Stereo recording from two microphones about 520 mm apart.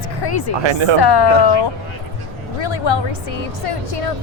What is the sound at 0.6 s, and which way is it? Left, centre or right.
Speech, right.